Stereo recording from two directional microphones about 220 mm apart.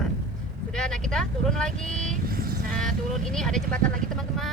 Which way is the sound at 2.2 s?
40° right (ahead or behind).